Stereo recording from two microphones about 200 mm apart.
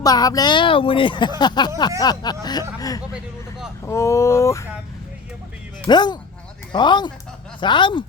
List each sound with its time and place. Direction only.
0.0 s speech: 20° left (ahead or behind)
5.9 s speech: 20° left (ahead or behind)